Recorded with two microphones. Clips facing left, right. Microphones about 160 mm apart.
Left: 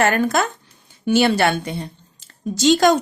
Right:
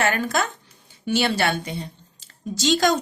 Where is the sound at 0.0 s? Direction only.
50° left (ahead or behind).